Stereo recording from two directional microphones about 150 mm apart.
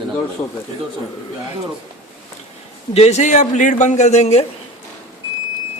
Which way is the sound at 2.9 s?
45° left (ahead or behind).